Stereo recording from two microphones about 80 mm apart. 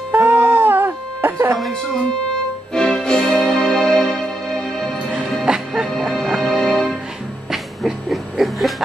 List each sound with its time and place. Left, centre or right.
0.1 s music: right
2.7 s music: centre
5.5 s music: centre
5.9 s music: centre
7.5 s a sound: centre